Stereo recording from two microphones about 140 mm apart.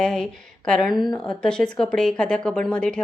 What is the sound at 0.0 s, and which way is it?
A woman's voice, 5° left (ahead or behind).